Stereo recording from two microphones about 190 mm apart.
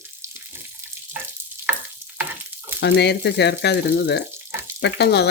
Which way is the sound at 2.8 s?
60° left (ahead or behind).